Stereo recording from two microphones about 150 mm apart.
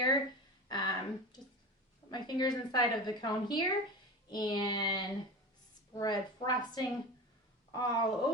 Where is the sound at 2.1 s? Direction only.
30° left (ahead or behind).